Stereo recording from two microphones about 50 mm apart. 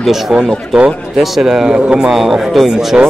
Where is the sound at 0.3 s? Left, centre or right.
Centre.